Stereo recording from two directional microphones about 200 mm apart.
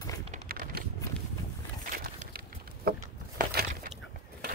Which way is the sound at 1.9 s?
45° right (ahead or behind).